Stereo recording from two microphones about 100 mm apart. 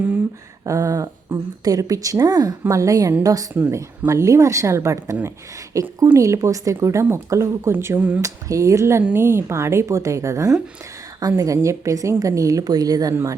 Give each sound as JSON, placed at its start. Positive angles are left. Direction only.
{"t": 0.6, "sound": "a woman's voice", "side_deg": -35}
{"t": 8.2, "sound": "a woman's voice", "side_deg": -30}